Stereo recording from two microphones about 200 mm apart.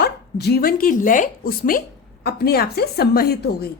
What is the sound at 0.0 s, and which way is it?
A woman's voice, 55° left (ahead or behind).